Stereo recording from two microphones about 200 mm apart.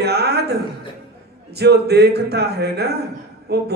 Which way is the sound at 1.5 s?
55° right (ahead or behind).